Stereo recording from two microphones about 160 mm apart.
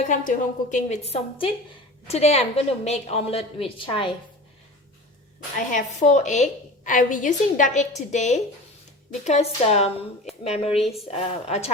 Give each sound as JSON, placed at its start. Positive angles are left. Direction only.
{"t": 0.0, "sound": "a woman's voice", "side_deg": 50}
{"t": 5.5, "sound": "a woman's voice", "side_deg": 50}